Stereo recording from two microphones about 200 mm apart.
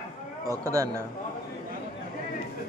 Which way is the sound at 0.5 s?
15° right (ahead or behind).